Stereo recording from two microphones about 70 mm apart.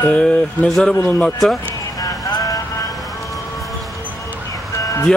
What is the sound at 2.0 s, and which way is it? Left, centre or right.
Vehicle, left.